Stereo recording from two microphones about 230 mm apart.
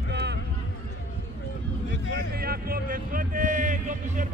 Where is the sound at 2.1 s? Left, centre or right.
Right.